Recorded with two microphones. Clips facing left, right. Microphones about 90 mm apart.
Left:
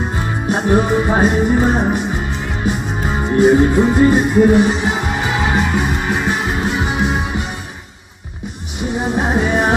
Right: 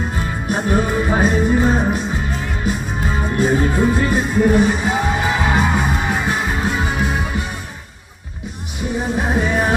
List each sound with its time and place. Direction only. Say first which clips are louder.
0.4 s music: left 4 dB; 20° left (ahead or behind)
9.0 s music: left 3 dB; 20° left (ahead or behind)